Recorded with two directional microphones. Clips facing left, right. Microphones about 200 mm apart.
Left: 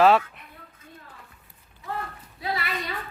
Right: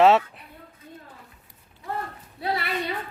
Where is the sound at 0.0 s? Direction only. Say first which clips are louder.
Right 1 dB; 25° right (ahead or behind).